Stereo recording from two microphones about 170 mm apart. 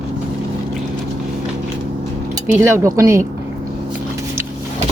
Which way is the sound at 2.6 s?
15° right (ahead or behind).